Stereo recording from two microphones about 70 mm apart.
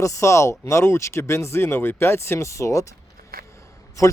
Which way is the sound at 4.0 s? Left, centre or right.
Left.